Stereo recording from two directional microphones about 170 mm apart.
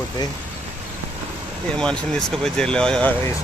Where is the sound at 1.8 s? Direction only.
5° left (ahead or behind).